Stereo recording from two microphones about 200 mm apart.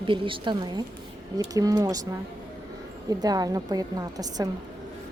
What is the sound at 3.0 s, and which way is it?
Speech, 20° right (ahead or behind).